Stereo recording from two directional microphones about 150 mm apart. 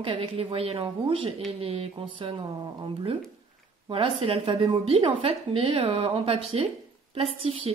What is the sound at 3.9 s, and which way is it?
A woman's voice, 35° right (ahead or behind).